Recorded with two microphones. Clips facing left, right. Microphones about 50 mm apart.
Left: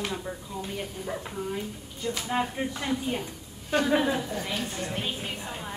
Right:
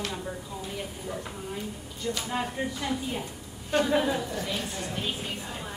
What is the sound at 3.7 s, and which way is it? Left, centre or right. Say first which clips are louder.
A woman's voice: left 1 dB; centre.